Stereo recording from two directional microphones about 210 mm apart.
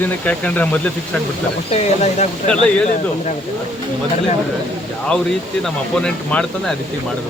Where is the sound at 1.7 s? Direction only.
30° left (ahead or behind).